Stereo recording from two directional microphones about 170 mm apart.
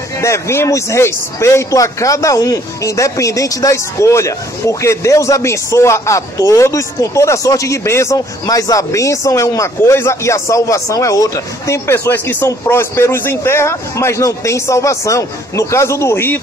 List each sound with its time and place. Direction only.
0.2 s a man's voice: 15° left (ahead or behind)